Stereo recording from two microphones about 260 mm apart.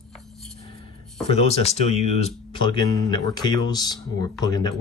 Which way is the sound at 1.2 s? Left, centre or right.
Left.